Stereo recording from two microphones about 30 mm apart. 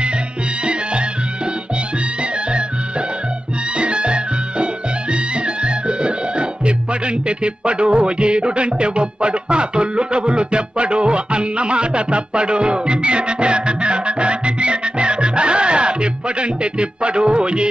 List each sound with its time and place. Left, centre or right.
3.7 s music: right
5.6 s speech: right